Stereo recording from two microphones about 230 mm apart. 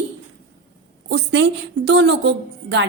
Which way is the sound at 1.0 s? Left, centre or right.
Right.